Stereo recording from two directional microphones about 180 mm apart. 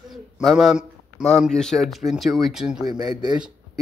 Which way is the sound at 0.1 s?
Centre (ahead or behind).